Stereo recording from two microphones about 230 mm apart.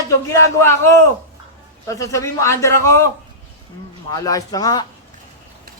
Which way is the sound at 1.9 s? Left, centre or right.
Centre.